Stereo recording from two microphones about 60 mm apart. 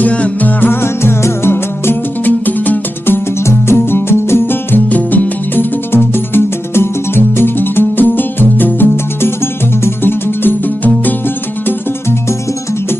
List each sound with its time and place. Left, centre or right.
0.0 s music: left
0.6 s music: left
3.4 s music: left